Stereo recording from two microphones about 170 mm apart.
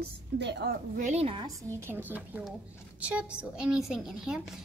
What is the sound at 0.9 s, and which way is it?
Speech, 45° right (ahead or behind).